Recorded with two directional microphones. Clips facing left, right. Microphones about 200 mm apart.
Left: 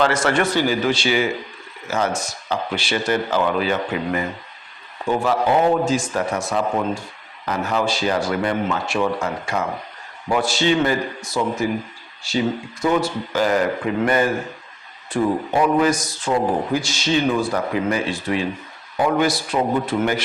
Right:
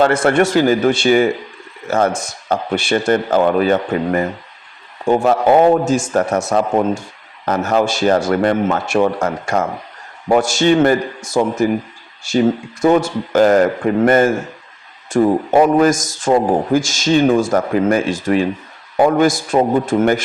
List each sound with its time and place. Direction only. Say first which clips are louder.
0.0 s a man's voice: right 5 dB; 55° right (ahead or behind)